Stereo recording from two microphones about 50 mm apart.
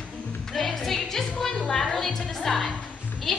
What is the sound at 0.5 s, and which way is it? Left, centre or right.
A woman's voice, centre.